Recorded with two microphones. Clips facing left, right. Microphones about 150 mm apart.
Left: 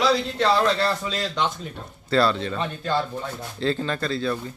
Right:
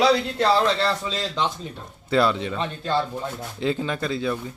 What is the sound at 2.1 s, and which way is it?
Speech, 15° right (ahead or behind).